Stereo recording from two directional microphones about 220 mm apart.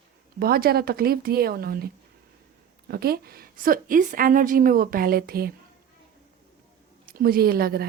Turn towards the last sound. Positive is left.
turn(degrees=-45)  # may be behind; listen again after turning